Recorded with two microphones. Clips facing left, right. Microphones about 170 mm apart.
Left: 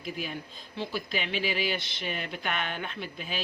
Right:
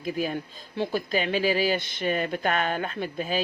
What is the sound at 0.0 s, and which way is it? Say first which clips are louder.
Speech: right 7 dB; 45° right (ahead or behind).